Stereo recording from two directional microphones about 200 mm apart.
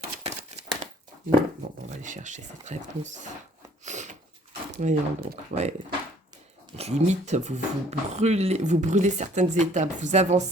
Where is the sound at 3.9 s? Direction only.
35° right (ahead or behind).